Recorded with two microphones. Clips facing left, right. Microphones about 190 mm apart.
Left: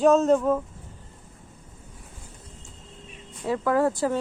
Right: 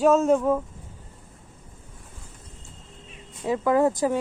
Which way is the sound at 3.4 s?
15° right (ahead or behind).